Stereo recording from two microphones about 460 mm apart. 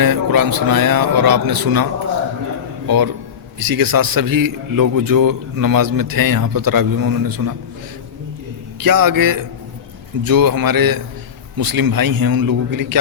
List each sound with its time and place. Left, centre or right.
0.0 s a man's voice: right
8.8 s a man's voice: right